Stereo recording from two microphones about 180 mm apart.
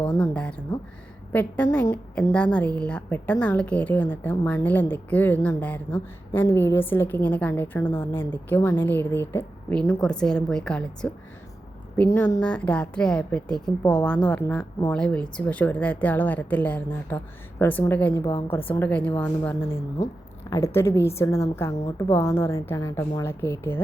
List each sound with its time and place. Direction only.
0.0 s a woman's voice: 10° left (ahead or behind)